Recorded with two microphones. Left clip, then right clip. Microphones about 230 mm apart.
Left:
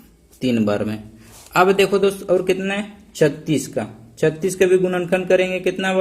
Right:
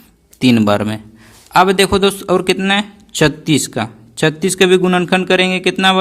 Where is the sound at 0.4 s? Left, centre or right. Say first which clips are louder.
Right 7 dB; right.